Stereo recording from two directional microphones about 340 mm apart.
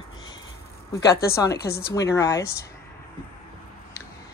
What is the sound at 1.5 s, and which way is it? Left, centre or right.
Speech, left.